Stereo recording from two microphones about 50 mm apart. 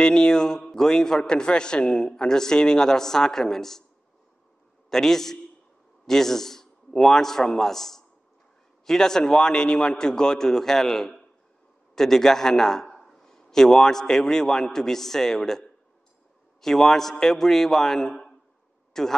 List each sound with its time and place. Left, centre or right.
0.0 s a man's voice: centre
4.8 s a man's voice: centre
16.6 s a man's voice: centre